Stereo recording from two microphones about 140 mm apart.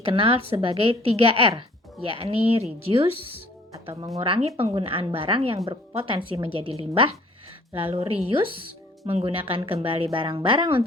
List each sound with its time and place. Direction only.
0.0 s a woman's voice: 40° right (ahead or behind)